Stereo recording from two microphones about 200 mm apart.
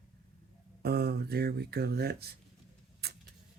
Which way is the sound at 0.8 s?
50° right (ahead or behind).